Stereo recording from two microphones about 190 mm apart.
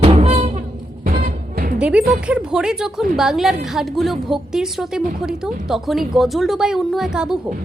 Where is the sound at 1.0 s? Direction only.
50° right (ahead or behind).